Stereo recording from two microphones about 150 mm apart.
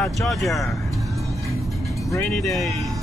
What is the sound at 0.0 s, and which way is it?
Speech, centre (ahead or behind).